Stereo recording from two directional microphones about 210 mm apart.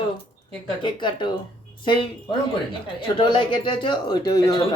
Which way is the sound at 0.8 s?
20° left (ahead or behind).